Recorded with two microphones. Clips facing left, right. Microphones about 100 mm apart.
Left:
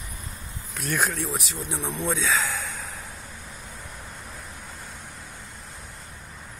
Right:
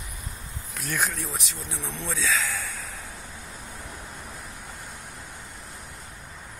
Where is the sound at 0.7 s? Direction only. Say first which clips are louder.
Left 3 dB; centre (ahead or behind).